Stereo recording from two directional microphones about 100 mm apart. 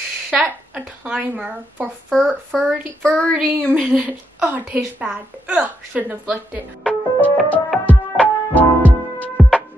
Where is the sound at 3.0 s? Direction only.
15° left (ahead or behind).